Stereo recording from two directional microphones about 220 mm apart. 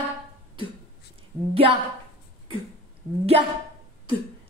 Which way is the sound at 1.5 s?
25° right (ahead or behind).